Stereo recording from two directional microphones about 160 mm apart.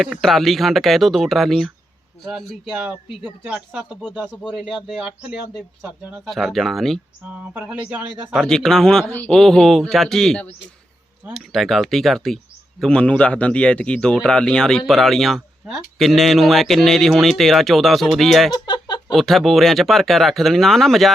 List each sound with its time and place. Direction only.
0.0 s a man's voice: centre (ahead or behind)
6.2 s a man's voice: centre (ahead or behind)
7.3 s speech: 10° right (ahead or behind)
8.4 s a man's voice: 5° left (ahead or behind)
18.5 s a sound: 30° left (ahead or behind)
19.1 s a man's voice: centre (ahead or behind)